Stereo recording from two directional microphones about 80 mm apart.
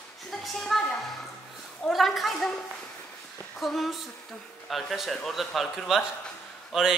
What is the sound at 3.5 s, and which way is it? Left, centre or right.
A woman's voice, centre.